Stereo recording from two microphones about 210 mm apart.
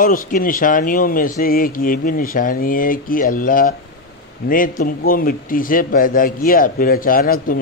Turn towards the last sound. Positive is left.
turn(degrees=40)  # may be behind; listen again after turning